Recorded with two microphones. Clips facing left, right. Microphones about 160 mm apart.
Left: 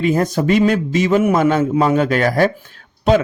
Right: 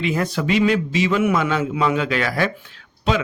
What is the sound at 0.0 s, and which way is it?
Speech, 45° left (ahead or behind).